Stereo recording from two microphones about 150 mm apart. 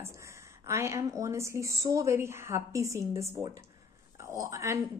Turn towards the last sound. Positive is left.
turn(degrees=-20)  # may be behind; listen again after turning